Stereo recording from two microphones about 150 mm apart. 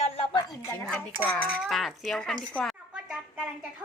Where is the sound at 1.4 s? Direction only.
5° right (ahead or behind).